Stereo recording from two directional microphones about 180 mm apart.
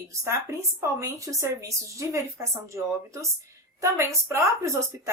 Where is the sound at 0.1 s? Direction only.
15° right (ahead or behind).